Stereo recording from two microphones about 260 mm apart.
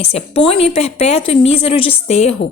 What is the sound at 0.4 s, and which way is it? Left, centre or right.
Speech, left.